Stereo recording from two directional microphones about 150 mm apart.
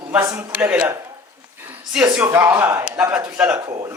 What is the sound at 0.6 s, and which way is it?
Speech, 10° right (ahead or behind).